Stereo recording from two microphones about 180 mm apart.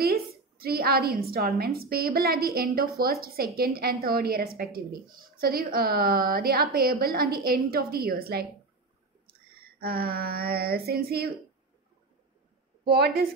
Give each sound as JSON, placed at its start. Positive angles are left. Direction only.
{"t": 0.0, "sound": "a woman's voice", "side_deg": -60}
{"t": 9.3, "sound": "a sound", "side_deg": -55}
{"t": 12.9, "sound": "a woman's voice", "side_deg": -60}